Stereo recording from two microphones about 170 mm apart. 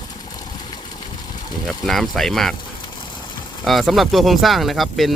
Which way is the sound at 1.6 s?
Centre (ahead or behind).